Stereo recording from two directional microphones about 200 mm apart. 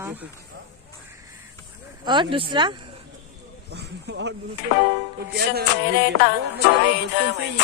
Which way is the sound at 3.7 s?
55° right (ahead or behind).